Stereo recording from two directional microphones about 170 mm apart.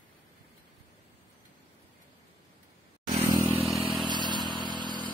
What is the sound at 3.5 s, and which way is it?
Vehicle, centre (ahead or behind).